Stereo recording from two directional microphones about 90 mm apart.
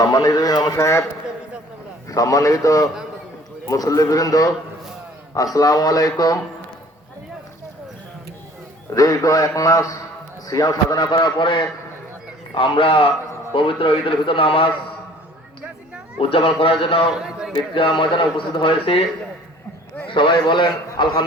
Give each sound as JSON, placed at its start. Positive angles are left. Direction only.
{"t": 0.0, "sound": "speech", "side_deg": 45}
{"t": 0.8, "sound": "a man's voice", "side_deg": 35}
{"t": 2.0, "sound": "a man's voice", "side_deg": 40}
{"t": 5.5, "sound": "a man's voice", "side_deg": 40}
{"t": 9.0, "sound": "a man's voice", "side_deg": 40}
{"t": 11.0, "sound": "a man's voice", "side_deg": 60}
{"t": 12.5, "sound": "a man's voice", "side_deg": 75}
{"t": 16.3, "sound": "a man's voice", "side_deg": 75}
{"t": 17.1, "sound": "a man's voice", "side_deg": -5}
{"t": 17.7, "sound": "a man's voice", "side_deg": 70}
{"t": 20.1, "sound": "a man's voice", "side_deg": 60}